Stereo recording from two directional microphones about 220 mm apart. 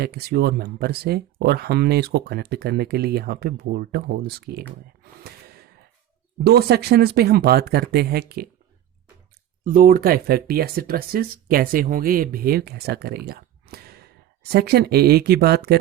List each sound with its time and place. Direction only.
0.0 s speech: 45° right (ahead or behind)
6.4 s speech: 45° right (ahead or behind)
9.6 s speech: 40° right (ahead or behind)